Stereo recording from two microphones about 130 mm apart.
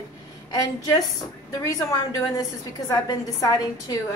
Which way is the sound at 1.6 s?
25° left (ahead or behind).